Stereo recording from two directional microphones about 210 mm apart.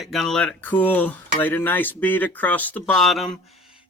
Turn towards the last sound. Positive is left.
turn(degrees=0)  # may be behind; listen again after turning